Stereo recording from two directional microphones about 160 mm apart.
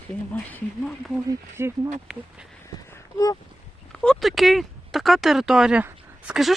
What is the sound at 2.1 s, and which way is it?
Speech, centre (ahead or behind).